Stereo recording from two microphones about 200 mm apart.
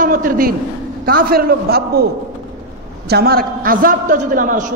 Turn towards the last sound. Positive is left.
turn(degrees=-40)  # may be behind; listen again after turning